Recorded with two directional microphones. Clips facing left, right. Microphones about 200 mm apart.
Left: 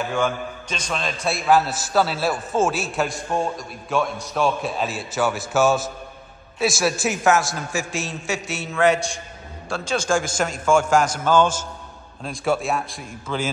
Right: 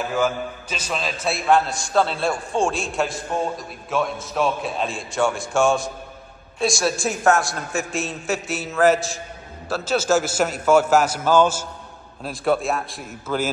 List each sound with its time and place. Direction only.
0.1 s a man's voice: 5° right (ahead or behind)